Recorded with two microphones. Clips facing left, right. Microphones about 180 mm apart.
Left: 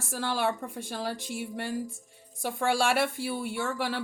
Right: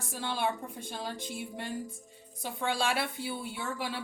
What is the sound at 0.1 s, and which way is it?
Speech, 75° left (ahead or behind).